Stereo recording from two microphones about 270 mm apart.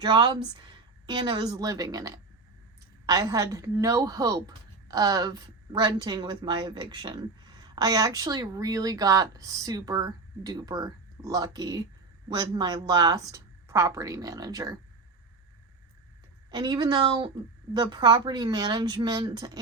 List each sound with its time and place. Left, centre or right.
0.0 s speech: centre
16.5 s speech: centre